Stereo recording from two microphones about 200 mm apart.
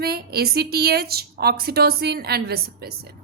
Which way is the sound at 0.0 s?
50° right (ahead or behind).